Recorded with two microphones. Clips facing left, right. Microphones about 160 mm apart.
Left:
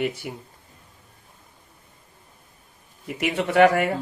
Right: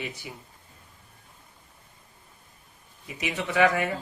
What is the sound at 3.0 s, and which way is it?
Speech, 60° left (ahead or behind).